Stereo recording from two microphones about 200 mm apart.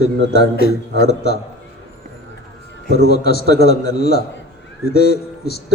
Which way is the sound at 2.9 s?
50° left (ahead or behind).